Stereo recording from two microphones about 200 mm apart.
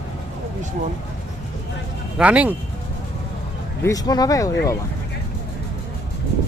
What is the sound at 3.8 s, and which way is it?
Speech, 20° left (ahead or behind).